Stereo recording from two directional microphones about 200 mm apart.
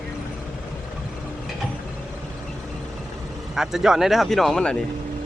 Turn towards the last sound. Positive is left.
turn(degrees=0)  # may be behind; listen again after turning